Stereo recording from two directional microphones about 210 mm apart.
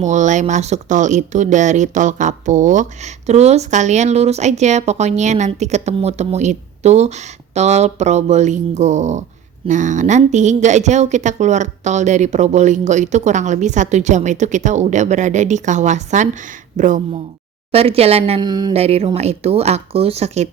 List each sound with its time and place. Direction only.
0.0 s speech: 35° right (ahead or behind)